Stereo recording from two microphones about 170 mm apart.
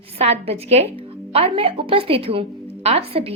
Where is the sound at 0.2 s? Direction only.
35° right (ahead or behind).